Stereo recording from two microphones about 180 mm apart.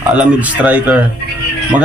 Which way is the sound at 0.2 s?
10° right (ahead or behind).